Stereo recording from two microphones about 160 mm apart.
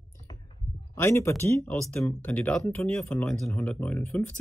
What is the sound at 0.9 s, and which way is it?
Speech, 15° left (ahead or behind).